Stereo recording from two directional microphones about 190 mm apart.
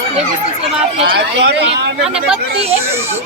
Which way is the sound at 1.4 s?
65° right (ahead or behind).